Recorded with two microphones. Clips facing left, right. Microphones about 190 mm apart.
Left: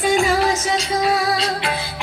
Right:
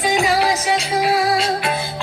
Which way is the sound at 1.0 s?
25° right (ahead or behind).